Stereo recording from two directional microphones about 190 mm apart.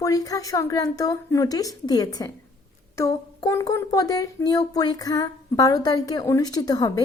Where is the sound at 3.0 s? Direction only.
15° left (ahead or behind).